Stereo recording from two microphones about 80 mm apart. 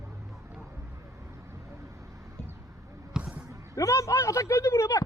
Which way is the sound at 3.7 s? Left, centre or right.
Left.